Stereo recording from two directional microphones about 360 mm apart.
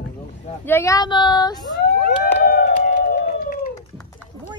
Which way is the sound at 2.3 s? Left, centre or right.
Left.